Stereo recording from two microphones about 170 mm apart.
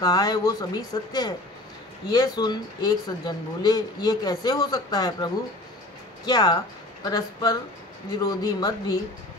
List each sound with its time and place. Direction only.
0.0 s speech: 20° left (ahead or behind)